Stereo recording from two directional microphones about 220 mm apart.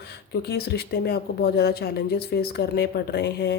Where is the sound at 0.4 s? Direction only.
45° left (ahead or behind).